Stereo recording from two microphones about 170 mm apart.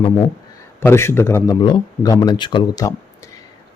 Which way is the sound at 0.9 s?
15° left (ahead or behind).